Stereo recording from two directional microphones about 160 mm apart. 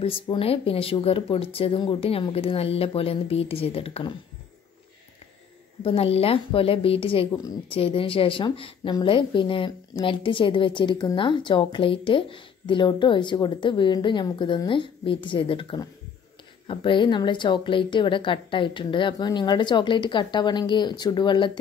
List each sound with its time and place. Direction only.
0.0 s a woman's voice: 35° left (ahead or behind)
5.9 s a woman's voice: 40° left (ahead or behind)